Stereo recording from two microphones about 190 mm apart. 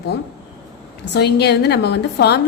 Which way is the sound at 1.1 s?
60° left (ahead or behind).